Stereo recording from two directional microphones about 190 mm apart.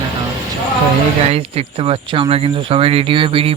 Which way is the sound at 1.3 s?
30° right (ahead or behind).